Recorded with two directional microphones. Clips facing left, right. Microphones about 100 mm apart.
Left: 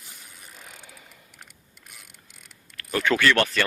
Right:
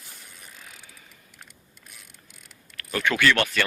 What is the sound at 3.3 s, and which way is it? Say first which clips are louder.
Speech: left 1 dB; 30° left (ahead or behind).